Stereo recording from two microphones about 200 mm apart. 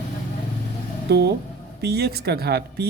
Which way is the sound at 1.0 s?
55° right (ahead or behind).